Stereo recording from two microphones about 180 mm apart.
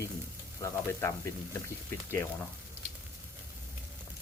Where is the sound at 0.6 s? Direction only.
15° left (ahead or behind).